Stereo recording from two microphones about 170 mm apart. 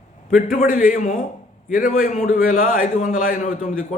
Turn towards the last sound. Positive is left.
turn(degrees=45)  # may be behind; listen again after turning